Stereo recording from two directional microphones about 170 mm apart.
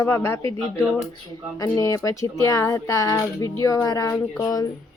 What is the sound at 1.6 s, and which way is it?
A woman's voice, 20° left (ahead or behind).